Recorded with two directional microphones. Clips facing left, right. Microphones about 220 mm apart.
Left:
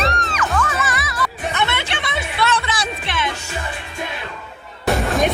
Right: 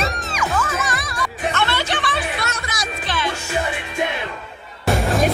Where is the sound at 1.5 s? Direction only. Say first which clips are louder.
Right 1 dB; 20° left (ahead or behind).